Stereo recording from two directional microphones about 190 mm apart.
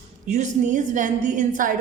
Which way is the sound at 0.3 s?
40° right (ahead or behind).